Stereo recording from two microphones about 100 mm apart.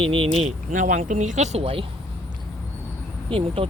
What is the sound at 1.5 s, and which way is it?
Speech, 70° right (ahead or behind).